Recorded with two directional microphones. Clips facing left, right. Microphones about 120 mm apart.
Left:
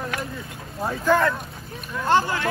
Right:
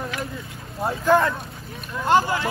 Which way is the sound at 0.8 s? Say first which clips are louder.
Right 1 dB; 20° right (ahead or behind).